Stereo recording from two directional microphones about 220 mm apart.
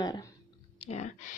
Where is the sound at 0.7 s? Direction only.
30° left (ahead or behind).